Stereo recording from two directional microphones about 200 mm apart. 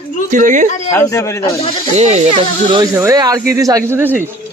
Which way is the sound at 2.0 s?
30° right (ahead or behind).